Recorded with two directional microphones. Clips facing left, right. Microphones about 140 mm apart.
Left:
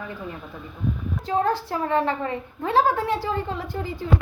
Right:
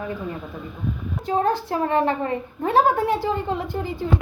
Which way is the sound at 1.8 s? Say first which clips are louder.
Right 2 dB; 55° right (ahead or behind).